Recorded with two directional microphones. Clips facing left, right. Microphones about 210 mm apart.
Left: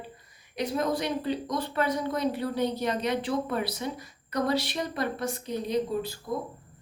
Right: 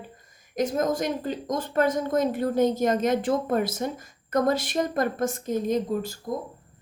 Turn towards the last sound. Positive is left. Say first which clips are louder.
# right 1 dB
turn(degrees=-45)  # may be behind; listen again after turning